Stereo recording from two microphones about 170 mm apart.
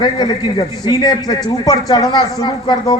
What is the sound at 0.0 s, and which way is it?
A man's voice, 25° left (ahead or behind).